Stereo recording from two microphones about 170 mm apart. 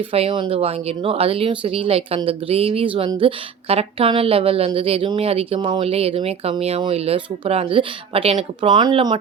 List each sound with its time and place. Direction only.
0.1 s speech: 35° right (ahead or behind)